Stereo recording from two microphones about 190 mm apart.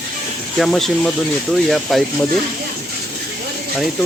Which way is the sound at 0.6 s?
Centre (ahead or behind).